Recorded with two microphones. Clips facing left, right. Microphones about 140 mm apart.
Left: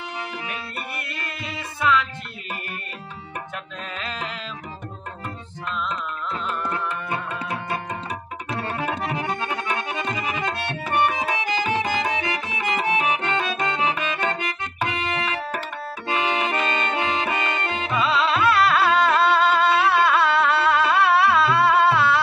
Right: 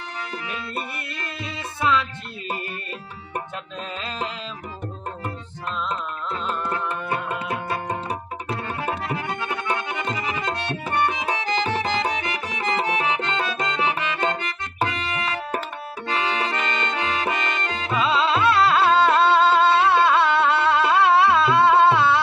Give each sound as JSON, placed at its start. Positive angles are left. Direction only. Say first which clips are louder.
{"t": 1.4, "sound": "music", "louder": "even", "side_deg": -30}
{"t": 5.7, "sound": "music", "louder": "right 1 dB", "side_deg": -30}
{"t": 7.2, "sound": "tabla", "louder": "right 2 dB", "side_deg": -25}
{"t": 9.0, "sound": "music", "louder": "left 1 dB", "side_deg": 20}
{"t": 11.3, "sound": "music", "louder": "even", "side_deg": 15}
{"t": 16.1, "sound": "accordion", "louder": "left 1 dB", "side_deg": 15}
{"t": 18.0, "sound": "music", "louder": "right 1 dB", "side_deg": -25}